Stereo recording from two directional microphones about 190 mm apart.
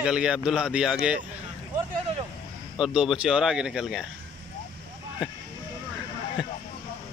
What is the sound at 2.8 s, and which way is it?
Speech, 5° right (ahead or behind).